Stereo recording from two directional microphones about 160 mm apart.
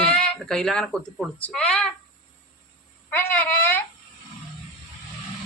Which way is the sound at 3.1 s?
10° left (ahead or behind).